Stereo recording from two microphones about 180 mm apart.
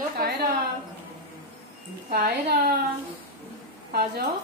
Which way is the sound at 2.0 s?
55° right (ahead or behind).